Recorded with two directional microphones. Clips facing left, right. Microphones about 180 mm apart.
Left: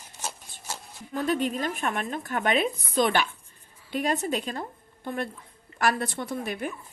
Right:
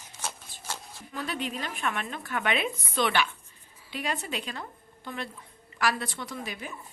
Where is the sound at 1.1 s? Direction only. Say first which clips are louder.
Left 7 dB; 45° left (ahead or behind).